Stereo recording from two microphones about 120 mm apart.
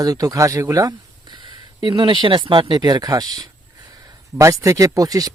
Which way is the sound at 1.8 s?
45° right (ahead or behind).